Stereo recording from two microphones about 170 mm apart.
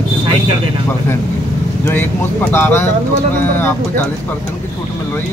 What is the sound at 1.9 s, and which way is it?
Speech, 10° left (ahead or behind).